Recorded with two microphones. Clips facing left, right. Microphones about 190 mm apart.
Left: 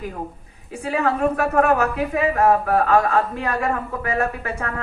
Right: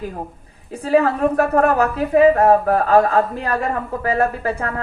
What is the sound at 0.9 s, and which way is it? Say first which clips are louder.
A woman's voice: right 5 dB; 35° right (ahead or behind).